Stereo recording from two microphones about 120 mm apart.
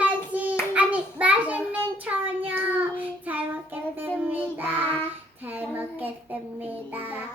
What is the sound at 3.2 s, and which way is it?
Child singing, 15° right (ahead or behind).